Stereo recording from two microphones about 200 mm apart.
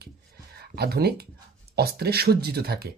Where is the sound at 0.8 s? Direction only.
50° right (ahead or behind).